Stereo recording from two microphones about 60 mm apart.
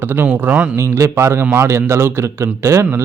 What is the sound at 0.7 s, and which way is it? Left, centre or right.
A man's voice, right.